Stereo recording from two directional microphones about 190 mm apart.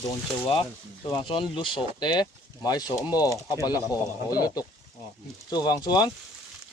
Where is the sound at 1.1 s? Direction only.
25° left (ahead or behind).